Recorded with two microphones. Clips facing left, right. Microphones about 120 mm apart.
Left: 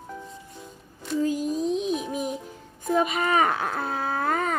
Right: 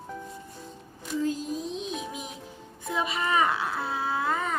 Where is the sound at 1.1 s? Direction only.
Centre (ahead or behind).